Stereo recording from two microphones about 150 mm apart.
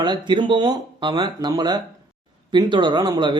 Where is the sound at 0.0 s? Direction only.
30° right (ahead or behind).